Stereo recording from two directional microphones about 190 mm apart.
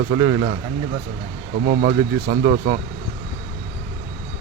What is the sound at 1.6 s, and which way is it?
Speech, 45° right (ahead or behind).